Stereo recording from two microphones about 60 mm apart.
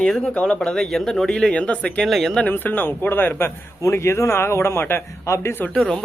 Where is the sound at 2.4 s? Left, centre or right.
Left.